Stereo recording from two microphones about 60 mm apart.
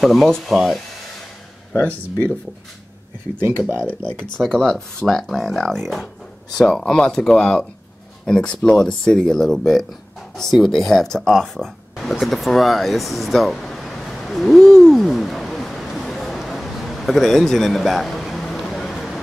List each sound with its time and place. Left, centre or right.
0.0 s speech: centre
3.4 s speech: right
3.8 s speech: left
5.0 s speech: centre
11.3 s a sound: centre